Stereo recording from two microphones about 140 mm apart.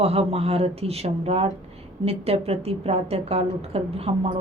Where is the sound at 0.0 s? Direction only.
45° right (ahead or behind).